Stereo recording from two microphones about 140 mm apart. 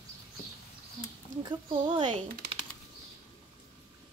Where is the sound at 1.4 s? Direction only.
30° right (ahead or behind).